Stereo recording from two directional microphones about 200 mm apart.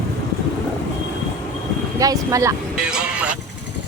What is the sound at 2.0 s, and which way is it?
Speech, 15° right (ahead or behind).